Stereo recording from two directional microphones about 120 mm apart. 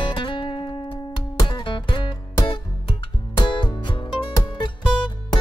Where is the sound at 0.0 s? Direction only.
45° left (ahead or behind).